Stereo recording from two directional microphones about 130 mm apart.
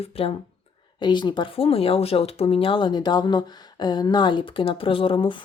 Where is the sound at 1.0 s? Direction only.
35° left (ahead or behind).